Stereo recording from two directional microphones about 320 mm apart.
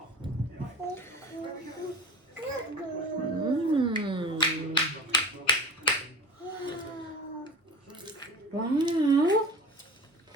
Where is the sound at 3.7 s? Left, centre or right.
Centre.